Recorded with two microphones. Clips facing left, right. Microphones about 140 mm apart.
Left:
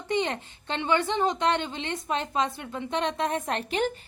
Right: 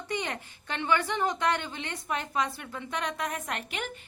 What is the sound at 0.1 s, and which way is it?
A woman's voice, 25° left (ahead or behind).